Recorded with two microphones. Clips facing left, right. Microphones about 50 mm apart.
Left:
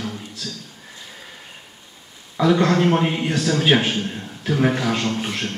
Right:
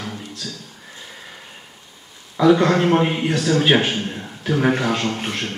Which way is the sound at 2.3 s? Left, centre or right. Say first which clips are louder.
Right 2 dB; centre.